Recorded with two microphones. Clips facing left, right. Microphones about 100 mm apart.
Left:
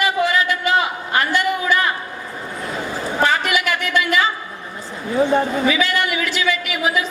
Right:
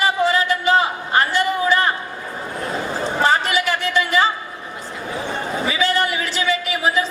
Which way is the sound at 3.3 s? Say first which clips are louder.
Right 1 dB; 35° right (ahead or behind).